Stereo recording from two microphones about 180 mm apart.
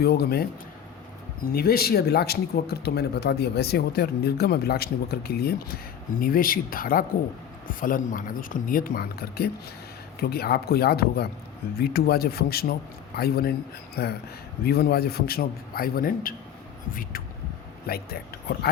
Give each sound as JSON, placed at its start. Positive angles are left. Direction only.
{"t": 0.0, "sound": "speech", "side_deg": 60}
{"t": 1.5, "sound": "speech", "side_deg": 60}